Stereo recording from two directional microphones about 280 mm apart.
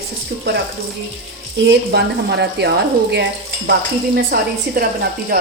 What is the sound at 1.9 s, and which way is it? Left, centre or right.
Speech, right.